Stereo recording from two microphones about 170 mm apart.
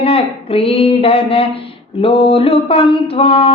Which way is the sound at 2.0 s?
35° left (ahead or behind).